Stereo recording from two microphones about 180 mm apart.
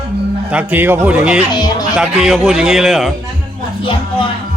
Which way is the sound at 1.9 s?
5° right (ahead or behind).